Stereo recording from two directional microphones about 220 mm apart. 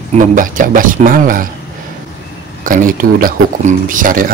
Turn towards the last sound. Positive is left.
turn(degrees=-40)  # may be behind; listen again after turning